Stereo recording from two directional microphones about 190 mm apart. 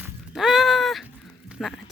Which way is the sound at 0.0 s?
Centre (ahead or behind).